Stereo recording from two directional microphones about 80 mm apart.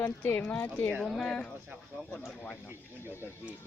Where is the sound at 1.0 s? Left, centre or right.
Centre.